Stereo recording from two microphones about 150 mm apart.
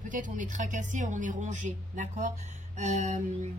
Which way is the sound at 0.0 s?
60° right (ahead or behind).